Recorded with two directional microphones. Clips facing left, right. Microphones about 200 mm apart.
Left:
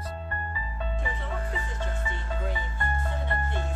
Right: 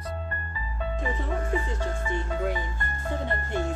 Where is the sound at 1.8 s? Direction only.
45° right (ahead or behind).